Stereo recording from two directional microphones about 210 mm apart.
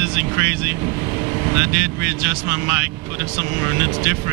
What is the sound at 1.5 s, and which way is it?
Speech, 10° right (ahead or behind).